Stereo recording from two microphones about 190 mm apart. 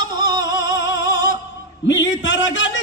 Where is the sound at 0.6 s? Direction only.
70° left (ahead or behind).